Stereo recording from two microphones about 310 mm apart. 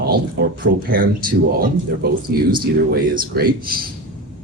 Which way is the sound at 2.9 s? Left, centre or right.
Right.